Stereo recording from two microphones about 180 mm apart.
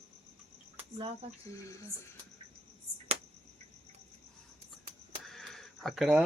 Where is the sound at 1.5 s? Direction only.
15° left (ahead or behind).